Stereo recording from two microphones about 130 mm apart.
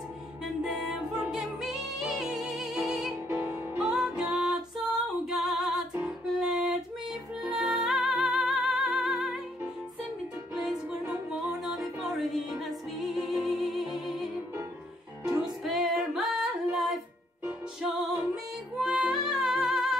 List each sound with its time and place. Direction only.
0.7 s music: centre (ahead or behind)
3.3 s music: 20° right (ahead or behind)
3.7 s music: 5° right (ahead or behind)
11.2 s music: 5° right (ahead or behind)
15.4 s music: centre (ahead or behind)
18.3 s music: 5° right (ahead or behind)